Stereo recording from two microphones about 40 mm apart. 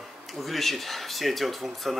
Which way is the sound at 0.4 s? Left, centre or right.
Centre.